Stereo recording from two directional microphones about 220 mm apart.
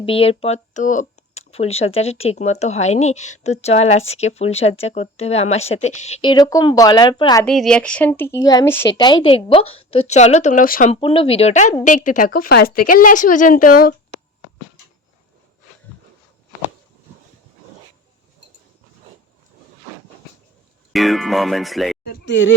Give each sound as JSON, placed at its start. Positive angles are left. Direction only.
{"t": 0.0, "sound": "speech", "side_deg": 25}
{"t": 7.4, "sound": "speech", "side_deg": 5}
{"t": 10.9, "sound": "a woman's voice", "side_deg": 25}
{"t": 20.9, "sound": "speech", "side_deg": 0}
{"t": 22.0, "sound": "a sound", "side_deg": 45}